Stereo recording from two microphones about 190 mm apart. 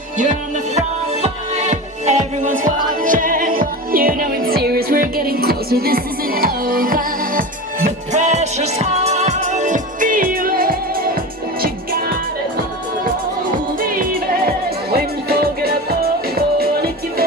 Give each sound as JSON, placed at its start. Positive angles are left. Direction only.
{"t": 0.2, "sound": "music", "side_deg": -40}
{"t": 13.7, "sound": "music", "side_deg": -50}